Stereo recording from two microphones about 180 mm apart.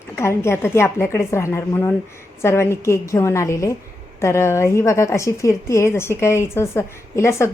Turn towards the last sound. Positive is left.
turn(degrees=15)  # may be behind; listen again after turning